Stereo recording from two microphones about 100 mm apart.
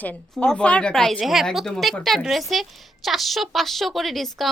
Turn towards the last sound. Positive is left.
turn(degrees=0)  # may be behind; listen again after turning